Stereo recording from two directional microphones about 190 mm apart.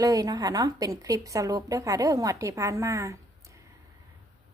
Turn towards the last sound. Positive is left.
turn(degrees=-15)  # may be behind; listen again after turning